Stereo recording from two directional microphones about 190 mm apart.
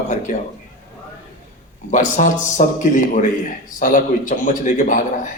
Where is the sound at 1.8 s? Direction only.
40° left (ahead or behind).